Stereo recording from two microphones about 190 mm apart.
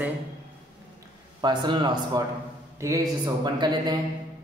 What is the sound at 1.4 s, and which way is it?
A man's voice, 25° right (ahead or behind).